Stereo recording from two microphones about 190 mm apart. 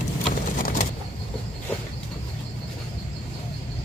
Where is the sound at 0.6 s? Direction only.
45° left (ahead or behind).